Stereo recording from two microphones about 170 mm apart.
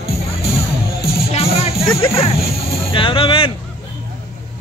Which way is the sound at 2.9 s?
30° left (ahead or behind).